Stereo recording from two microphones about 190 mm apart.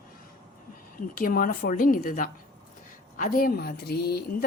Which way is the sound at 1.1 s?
50° left (ahead or behind).